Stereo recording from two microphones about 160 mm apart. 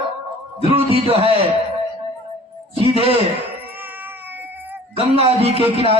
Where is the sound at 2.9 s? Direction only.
35° right (ahead or behind).